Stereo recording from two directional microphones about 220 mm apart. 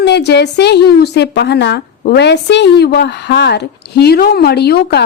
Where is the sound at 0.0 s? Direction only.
50° left (ahead or behind).